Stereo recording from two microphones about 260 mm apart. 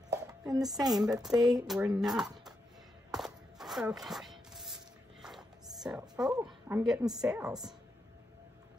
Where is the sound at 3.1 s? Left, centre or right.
Centre.